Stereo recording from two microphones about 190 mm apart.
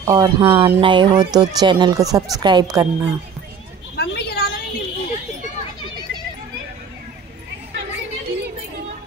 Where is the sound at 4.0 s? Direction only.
55° left (ahead or behind).